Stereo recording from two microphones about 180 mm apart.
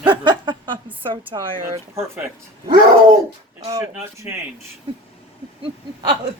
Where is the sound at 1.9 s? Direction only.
15° right (ahead or behind).